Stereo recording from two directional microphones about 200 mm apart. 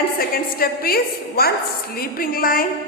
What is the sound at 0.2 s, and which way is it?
A woman's voice, 50° left (ahead or behind).